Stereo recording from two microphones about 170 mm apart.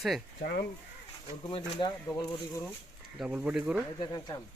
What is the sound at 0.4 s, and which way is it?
Speech, 70° left (ahead or behind).